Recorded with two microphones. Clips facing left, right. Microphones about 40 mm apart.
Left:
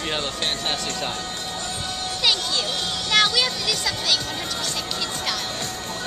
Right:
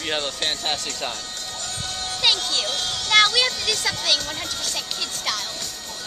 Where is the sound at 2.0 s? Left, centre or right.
Centre.